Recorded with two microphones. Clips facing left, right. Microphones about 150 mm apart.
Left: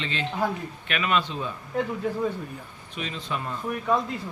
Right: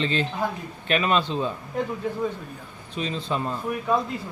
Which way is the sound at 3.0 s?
30° right (ahead or behind).